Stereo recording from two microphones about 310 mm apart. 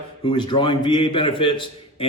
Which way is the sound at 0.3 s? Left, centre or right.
Centre.